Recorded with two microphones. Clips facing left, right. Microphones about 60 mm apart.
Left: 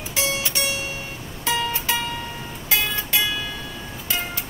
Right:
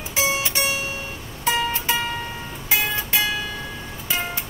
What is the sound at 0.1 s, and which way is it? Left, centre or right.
Music, right.